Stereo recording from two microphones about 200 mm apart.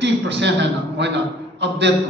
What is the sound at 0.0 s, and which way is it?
A man's voice, 60° right (ahead or behind).